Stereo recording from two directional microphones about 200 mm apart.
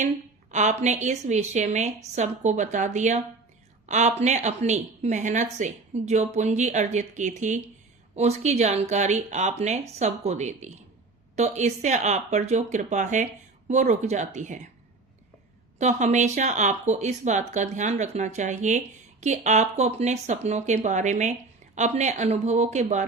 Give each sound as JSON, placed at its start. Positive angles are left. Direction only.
{"t": 0.5, "sound": "a woman's voice", "side_deg": -35}
{"t": 15.8, "sound": "a woman's voice", "side_deg": -35}